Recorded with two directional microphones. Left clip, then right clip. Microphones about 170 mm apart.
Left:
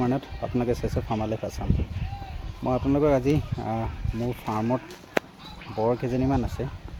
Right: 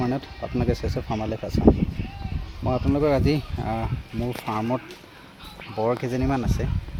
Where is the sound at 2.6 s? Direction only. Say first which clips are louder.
Even; centre (ahead or behind).